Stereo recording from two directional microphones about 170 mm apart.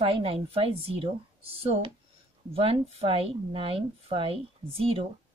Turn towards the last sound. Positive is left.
turn(degrees=-35)  # may be behind; listen again after turning